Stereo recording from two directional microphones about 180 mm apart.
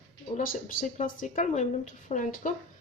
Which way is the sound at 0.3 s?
45° left (ahead or behind).